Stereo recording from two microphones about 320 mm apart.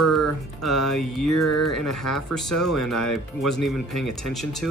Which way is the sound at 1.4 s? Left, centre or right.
Left.